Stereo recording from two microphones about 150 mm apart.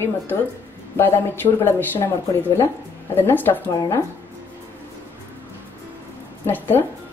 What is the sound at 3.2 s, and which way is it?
Speech, 15° left (ahead or behind).